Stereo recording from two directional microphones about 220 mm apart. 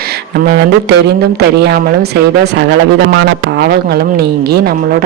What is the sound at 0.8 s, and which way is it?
Speech, 50° right (ahead or behind).